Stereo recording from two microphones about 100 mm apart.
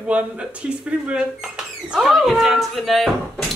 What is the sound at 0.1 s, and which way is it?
A woman's voice, 15° right (ahead or behind).